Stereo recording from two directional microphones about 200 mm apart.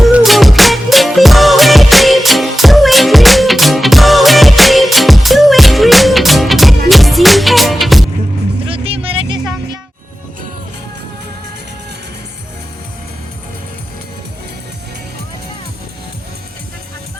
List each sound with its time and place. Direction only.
0.0 s music: centre (ahead or behind)
8.6 s music: 30° right (ahead or behind)